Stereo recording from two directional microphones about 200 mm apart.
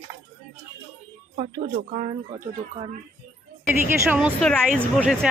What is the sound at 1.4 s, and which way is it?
Speech, 35° right (ahead or behind).